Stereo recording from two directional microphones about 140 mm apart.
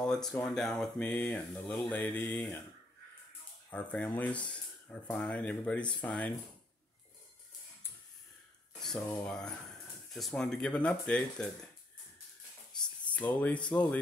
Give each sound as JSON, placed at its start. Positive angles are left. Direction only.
{"t": 0.0, "sound": "speech", "side_deg": 5}
{"t": 3.7, "sound": "speech", "side_deg": 10}
{"t": 8.8, "sound": "speech", "side_deg": 5}
{"t": 12.7, "sound": "speech", "side_deg": 10}